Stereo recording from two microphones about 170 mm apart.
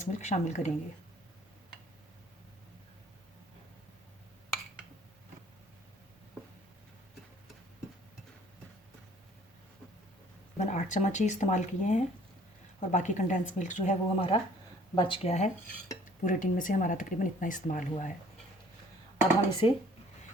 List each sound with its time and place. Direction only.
0.0 s speech: 45° left (ahead or behind)
10.6 s speech: 45° left (ahead or behind)
14.9 s speech: 30° left (ahead or behind); by 18.1 s 50° left (ahead or behind)
19.5 s speech: 30° left (ahead or behind)